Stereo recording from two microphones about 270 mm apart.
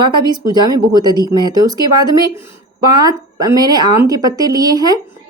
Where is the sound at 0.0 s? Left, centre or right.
Centre.